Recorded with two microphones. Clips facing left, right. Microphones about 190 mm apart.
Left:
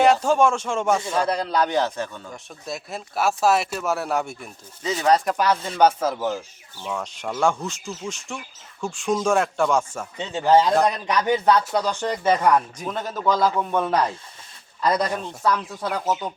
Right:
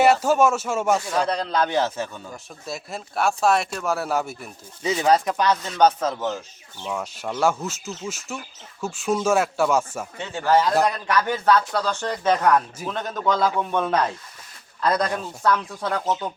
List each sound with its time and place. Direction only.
0.0 s speech: 5° right (ahead or behind)
1.1 s speech: 5° left (ahead or behind)
1.6 s speech: 5° right (ahead or behind)
5.5 s speech: 10° left (ahead or behind)
6.8 s speech: 5° right (ahead or behind)
10.2 s speech: 20° left (ahead or behind)